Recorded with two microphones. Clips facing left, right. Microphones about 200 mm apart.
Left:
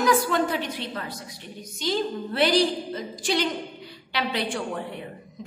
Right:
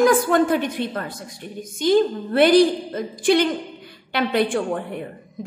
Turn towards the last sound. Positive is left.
turn(degrees=-55)  # may be behind; listen again after turning